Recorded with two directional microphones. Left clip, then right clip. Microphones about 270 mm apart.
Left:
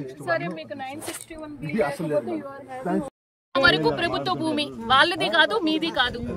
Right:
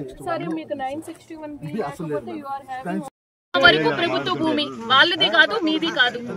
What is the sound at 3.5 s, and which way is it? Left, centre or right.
Speech, centre.